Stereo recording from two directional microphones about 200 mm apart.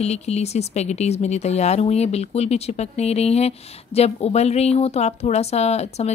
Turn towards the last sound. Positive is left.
turn(degrees=35)  # may be behind; listen again after turning